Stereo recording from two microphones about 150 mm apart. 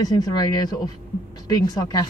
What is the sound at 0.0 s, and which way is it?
Speech, 25° left (ahead or behind).